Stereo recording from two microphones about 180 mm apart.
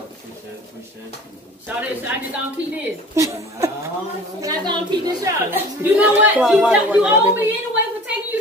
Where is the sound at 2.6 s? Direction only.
90° right.